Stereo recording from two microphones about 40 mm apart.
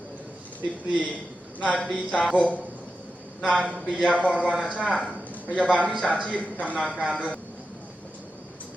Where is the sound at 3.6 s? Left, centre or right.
Right.